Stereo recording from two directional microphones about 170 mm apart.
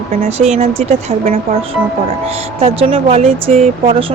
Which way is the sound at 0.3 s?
40° right (ahead or behind).